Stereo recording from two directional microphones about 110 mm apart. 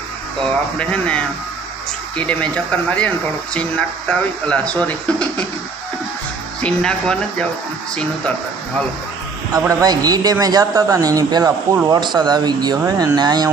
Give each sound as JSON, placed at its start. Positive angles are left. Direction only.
{"t": 0.8, "sound": "speech", "side_deg": 10}
{"t": 3.5, "sound": "speech", "side_deg": 10}
{"t": 6.6, "sound": "speech", "side_deg": 10}
{"t": 9.5, "sound": "speech", "side_deg": -35}